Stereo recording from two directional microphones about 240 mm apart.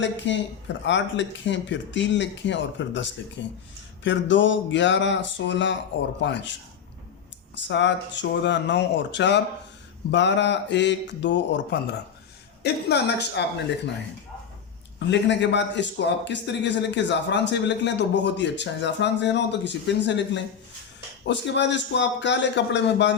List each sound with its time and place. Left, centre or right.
0.0 s a man's voice: left
7.5 s a man's voice: left
14.9 s a man's voice: left